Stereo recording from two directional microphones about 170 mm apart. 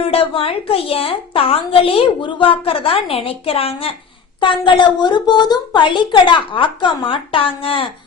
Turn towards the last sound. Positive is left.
turn(degrees=35)  # may be behind; listen again after turning